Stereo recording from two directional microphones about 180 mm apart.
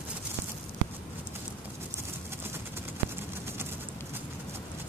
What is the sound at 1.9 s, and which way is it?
Vehicle, 15° right (ahead or behind).